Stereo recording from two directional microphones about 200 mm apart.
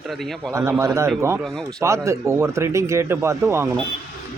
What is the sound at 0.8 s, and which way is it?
Speech, 15° right (ahead or behind).